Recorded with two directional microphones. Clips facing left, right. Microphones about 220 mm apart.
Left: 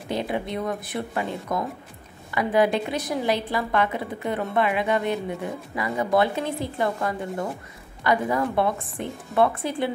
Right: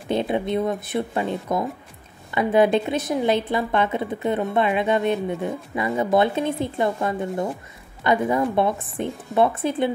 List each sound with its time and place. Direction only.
0.1 s a woman's voice: 25° right (ahead or behind)